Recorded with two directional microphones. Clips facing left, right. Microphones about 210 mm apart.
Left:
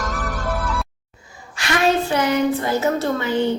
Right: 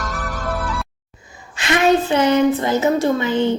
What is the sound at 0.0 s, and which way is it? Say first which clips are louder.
Music: even; centre (ahead or behind).